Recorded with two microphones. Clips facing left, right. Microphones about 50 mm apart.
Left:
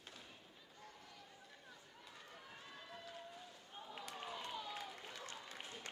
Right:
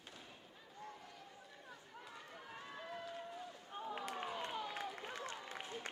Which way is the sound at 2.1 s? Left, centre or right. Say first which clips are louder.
Right 2 dB; centre.